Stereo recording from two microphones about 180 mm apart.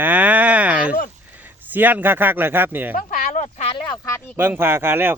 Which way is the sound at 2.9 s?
50° left (ahead or behind).